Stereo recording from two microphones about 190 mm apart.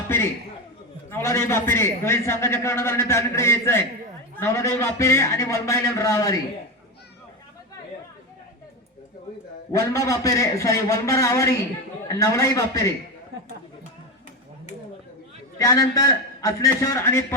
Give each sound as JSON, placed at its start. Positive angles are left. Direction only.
{"t": 0.1, "sound": "a sound", "side_deg": 10}
{"t": 1.1, "sound": "a man's voice", "side_deg": 10}
{"t": 9.7, "sound": "a man's voice", "side_deg": 15}
{"t": 15.5, "sound": "a man's voice", "side_deg": 15}